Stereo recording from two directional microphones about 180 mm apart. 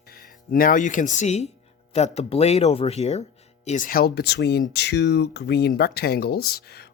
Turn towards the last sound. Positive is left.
turn(degrees=60)  # may be behind; listen again after turning